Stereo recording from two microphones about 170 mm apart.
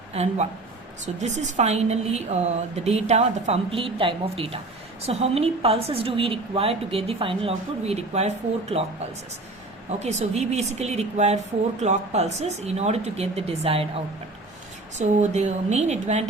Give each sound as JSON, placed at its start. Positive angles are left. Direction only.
{"t": 0.1, "sound": "a woman's voice", "side_deg": -40}
{"t": 10.0, "sound": "a woman's voice", "side_deg": -40}
{"t": 14.9, "sound": "a woman's voice", "side_deg": -40}